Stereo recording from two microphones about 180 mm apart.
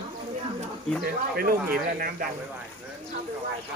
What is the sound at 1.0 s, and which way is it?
Speech, 55° right (ahead or behind).